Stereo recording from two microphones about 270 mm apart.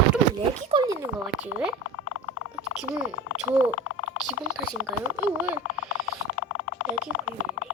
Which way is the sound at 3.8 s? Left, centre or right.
Left.